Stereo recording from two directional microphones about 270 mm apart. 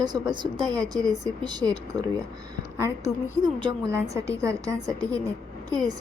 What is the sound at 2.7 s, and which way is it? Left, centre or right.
A woman's voice, centre.